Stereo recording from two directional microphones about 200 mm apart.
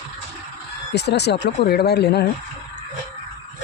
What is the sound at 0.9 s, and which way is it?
Speech, 55° left (ahead or behind).